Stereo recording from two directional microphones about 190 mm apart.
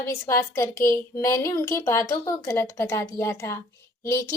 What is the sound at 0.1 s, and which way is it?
A woman's voice, 15° left (ahead or behind).